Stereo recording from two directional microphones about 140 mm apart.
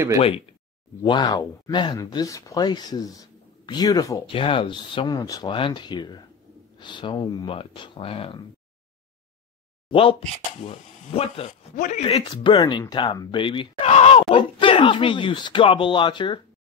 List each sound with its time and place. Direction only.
1.0 s speech: 30° left (ahead or behind)
4.3 s speech: 40° left (ahead or behind)
9.8 s speech: 40° left (ahead or behind)
11.7 s speech: 65° left (ahead or behind)
12.2 s speech: 35° left (ahead or behind)